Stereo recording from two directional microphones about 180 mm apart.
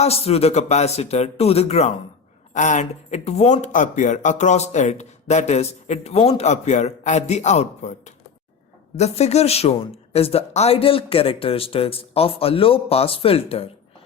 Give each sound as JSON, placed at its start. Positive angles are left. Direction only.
{"t": 0.0, "sound": "speech", "side_deg": 35}
{"t": 9.0, "sound": "speech", "side_deg": 35}